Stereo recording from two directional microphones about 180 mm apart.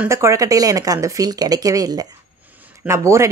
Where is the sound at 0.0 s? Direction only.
15° right (ahead or behind).